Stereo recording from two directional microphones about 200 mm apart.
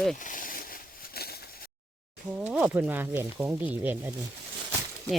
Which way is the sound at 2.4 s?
5° right (ahead or behind).